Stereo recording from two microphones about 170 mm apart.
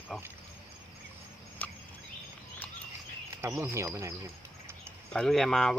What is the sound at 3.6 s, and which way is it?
Mechanisms, 15° right (ahead or behind).